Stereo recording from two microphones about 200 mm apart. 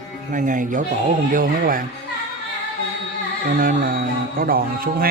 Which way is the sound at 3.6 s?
45° right (ahead or behind).